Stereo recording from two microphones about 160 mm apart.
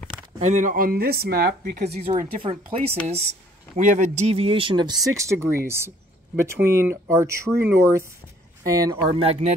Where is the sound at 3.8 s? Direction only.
45° right (ahead or behind); by 7.5 s 20° right (ahead or behind).